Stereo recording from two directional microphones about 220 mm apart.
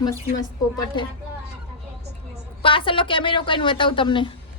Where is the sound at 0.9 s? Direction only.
20° left (ahead or behind).